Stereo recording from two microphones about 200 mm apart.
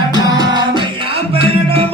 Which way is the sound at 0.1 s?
20° right (ahead or behind).